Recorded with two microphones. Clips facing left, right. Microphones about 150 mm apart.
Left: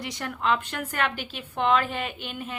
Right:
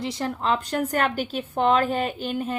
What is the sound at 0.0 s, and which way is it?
A woman's voice, 30° right (ahead or behind).